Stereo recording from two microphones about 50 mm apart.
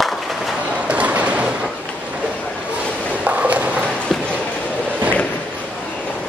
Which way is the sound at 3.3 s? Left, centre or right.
Right.